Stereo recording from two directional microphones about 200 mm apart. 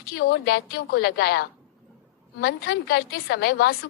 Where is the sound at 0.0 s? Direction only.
50° left (ahead or behind).